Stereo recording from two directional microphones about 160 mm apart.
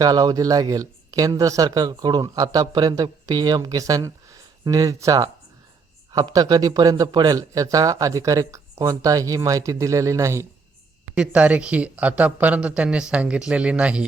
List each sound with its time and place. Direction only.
0.0 s speech: 25° right (ahead or behind)
11.2 s speech: 5° right (ahead or behind)